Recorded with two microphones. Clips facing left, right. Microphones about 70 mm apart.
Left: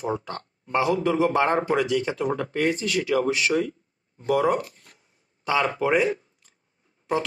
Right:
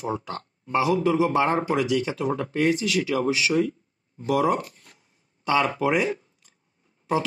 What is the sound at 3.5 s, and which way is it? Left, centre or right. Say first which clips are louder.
Speech: right 2 dB; centre.